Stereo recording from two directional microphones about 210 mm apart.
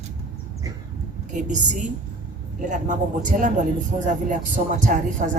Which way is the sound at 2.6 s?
35° right (ahead or behind).